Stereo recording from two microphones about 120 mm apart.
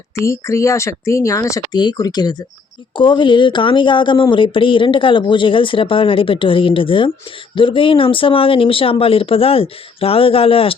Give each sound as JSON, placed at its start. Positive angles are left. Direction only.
{"t": 0.2, "sound": "speech", "side_deg": 25}